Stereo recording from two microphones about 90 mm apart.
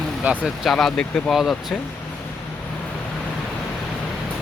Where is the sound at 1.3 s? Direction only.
Centre (ahead or behind).